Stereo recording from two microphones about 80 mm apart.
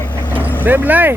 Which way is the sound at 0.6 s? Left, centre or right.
Right.